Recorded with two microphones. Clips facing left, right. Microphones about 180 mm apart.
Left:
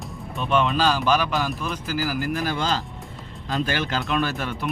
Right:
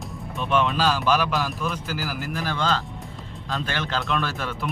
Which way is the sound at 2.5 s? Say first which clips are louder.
Even; 15° left (ahead or behind).